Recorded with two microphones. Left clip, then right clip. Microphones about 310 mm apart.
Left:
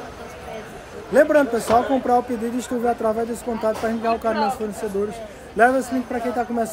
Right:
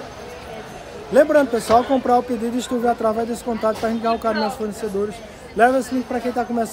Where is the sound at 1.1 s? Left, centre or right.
Centre.